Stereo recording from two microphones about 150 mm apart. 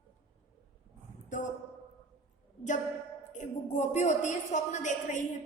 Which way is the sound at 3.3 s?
55° left (ahead or behind).